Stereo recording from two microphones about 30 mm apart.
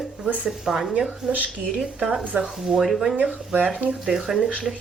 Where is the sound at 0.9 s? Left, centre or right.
Right.